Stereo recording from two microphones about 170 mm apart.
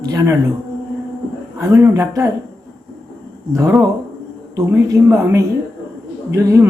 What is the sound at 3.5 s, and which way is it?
Speech, 20° right (ahead or behind).